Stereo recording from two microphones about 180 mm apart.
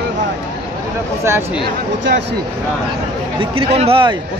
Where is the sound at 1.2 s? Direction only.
15° right (ahead or behind).